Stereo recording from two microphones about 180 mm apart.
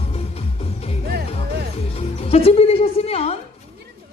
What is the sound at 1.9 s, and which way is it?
Music, 35° left (ahead or behind).